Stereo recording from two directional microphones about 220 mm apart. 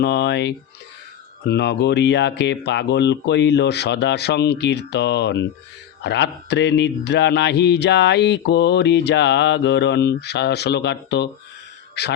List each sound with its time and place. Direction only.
0.0 s speech: 50° left (ahead or behind)